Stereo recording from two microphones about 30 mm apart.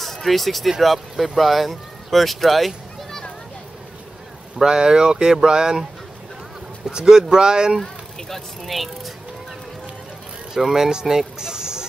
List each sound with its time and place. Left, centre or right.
0.0 s speech: centre
4.6 s speech: right
6.9 s speech: right
8.6 s speech: centre
10.6 s speech: centre
11.3 s a sound: right